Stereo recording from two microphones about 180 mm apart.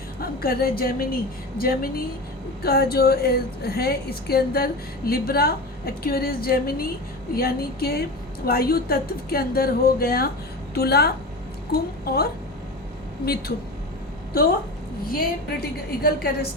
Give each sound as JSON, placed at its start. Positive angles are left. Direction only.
{"t": 0.2, "sound": "a woman's voice", "side_deg": 60}
{"t": 15.1, "sound": "a woman's voice", "side_deg": 55}